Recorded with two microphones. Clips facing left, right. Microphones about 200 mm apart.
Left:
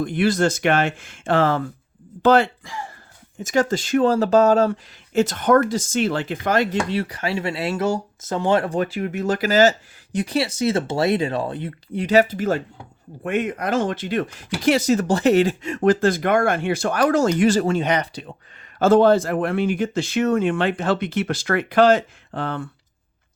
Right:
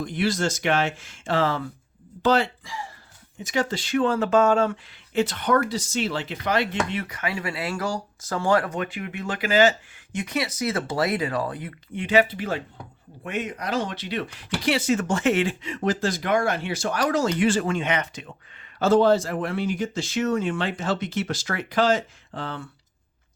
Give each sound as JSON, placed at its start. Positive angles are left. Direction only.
{"t": 0.0, "sound": "speech", "side_deg": 55}
{"t": 18.8, "sound": "speech", "side_deg": 55}